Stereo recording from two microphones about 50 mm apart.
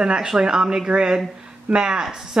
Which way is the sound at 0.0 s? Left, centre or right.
Centre.